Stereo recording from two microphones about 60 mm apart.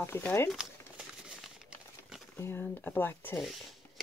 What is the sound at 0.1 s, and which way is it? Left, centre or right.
Speech, left.